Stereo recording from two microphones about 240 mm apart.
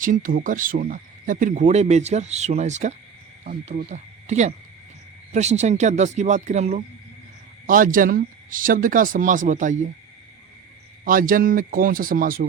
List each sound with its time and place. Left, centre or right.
0.0 s speech: right
11.0 s speech: right